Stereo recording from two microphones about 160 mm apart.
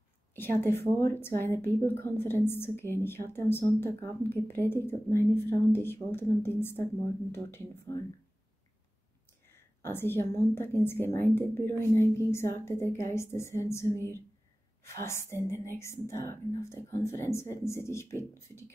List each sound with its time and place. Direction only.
0.4 s a woman's voice: 15° left (ahead or behind)
9.8 s a woman's voice: 15° left (ahead or behind)
15.0 s a woman's voice: 15° left (ahead or behind)